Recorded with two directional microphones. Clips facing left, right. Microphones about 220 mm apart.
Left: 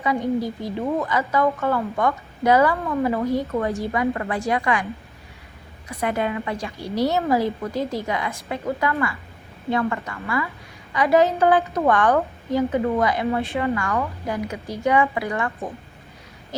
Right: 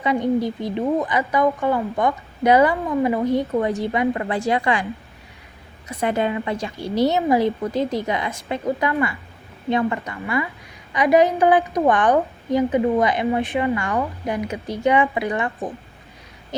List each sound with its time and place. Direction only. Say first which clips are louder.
0.0 s a woman's voice: right 3 dB; 25° right (ahead or behind)
5.9 s a woman's voice: right 2 dB; 25° right (ahead or behind)